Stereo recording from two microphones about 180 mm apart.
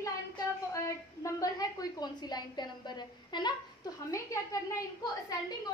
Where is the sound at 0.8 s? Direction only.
20° left (ahead or behind).